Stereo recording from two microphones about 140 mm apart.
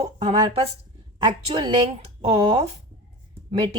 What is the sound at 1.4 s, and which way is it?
Speech, 35° right (ahead or behind).